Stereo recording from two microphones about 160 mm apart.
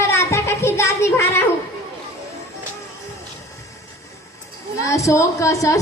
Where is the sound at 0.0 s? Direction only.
20° left (ahead or behind).